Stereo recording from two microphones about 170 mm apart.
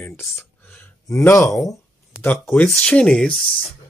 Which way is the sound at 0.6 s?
15° left (ahead or behind).